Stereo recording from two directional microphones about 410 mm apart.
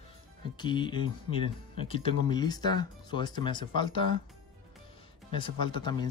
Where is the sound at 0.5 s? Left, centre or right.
Centre.